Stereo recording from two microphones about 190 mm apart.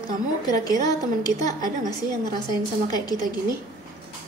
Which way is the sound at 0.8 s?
20° left (ahead or behind).